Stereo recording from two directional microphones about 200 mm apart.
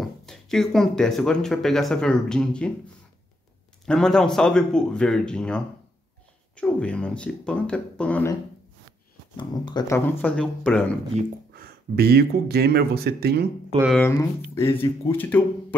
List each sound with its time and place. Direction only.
0.0 s speech: centre (ahead or behind)
3.8 s speech: 5° left (ahead or behind)
9.4 s speech: 20° left (ahead or behind)
11.5 s speech: 50° right (ahead or behind)
13.9 s speech: 15° left (ahead or behind)